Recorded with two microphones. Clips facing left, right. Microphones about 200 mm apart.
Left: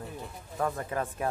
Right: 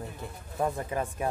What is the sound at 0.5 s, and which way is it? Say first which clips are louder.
Speech: right 1 dB; 20° right (ahead or behind).